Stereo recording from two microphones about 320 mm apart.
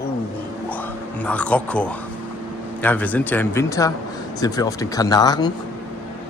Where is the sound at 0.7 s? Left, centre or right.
Centre.